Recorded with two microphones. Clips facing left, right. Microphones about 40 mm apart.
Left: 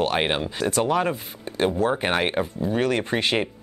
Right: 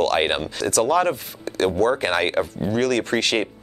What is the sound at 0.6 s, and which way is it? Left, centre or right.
Speech, left.